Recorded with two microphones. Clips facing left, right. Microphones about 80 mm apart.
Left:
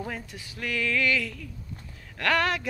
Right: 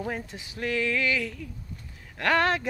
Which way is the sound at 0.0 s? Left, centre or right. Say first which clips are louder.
Right 3 dB; right.